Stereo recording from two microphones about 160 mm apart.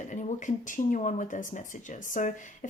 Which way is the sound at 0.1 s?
50° left (ahead or behind).